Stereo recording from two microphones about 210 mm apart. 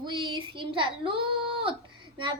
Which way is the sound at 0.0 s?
20° right (ahead or behind).